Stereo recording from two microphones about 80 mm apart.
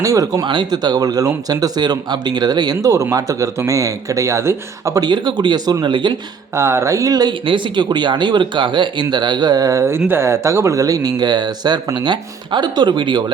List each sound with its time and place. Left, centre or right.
0.0 s speech: right
0.4 s speech: right
2.9 s speech: right
4.9 s speech: right
5.8 s speech: right
6.5 s speech: right
7.4 s speech: right
7.9 s speech: right
10.1 s speech: right